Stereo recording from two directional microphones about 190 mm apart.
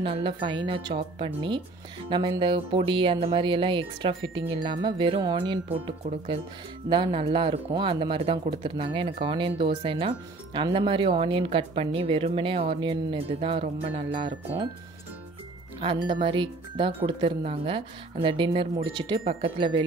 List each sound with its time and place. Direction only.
0.0 s speech: 25° right (ahead or behind)
15.8 s speech: 25° right (ahead or behind)